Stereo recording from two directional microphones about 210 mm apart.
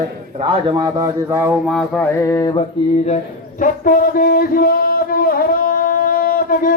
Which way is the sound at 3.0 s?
35° left (ahead or behind).